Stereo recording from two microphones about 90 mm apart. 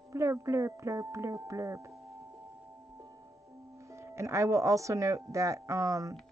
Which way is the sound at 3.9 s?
30° right (ahead or behind).